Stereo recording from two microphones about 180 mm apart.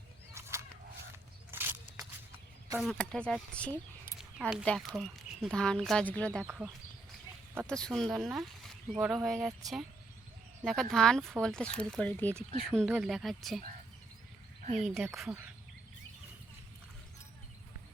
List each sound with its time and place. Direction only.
0.3 s a sound: 15° right (ahead or behind)
3.0 s speech: 5° left (ahead or behind)
6.4 s speech: 10° right (ahead or behind)
7.7 s speech: 5° left (ahead or behind)
9.2 s speech: centre (ahead or behind)
10.6 s speech: centre (ahead or behind)
14.6 s a sound: 40° right (ahead or behind)
14.8 s speech: centre (ahead or behind)